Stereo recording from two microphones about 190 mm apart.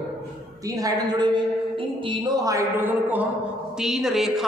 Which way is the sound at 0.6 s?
20° right (ahead or behind).